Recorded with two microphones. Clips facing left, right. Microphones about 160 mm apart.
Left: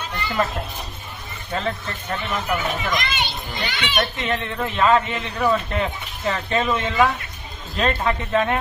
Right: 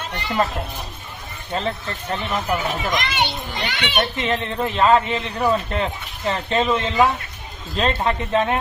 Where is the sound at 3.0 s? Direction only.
70° right (ahead or behind).